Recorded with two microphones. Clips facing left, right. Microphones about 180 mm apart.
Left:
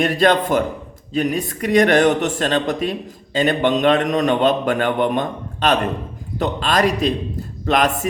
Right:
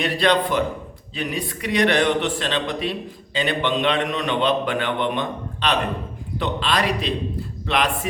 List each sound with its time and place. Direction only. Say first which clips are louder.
0.0 s a man's voice: left 4 dB; 45° left (ahead or behind)